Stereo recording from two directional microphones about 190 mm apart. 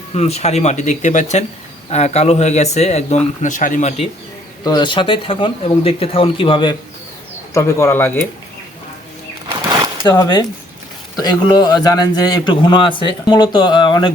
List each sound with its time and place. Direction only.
0.1 s speech: 35° left (ahead or behind)
4.6 s a man's voice: 25° left (ahead or behind)
7.5 s speech: 15° left (ahead or behind)
10.0 s a man's voice: 20° left (ahead or behind)